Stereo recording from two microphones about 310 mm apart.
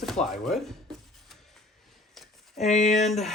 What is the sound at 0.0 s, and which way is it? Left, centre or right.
Speech, centre.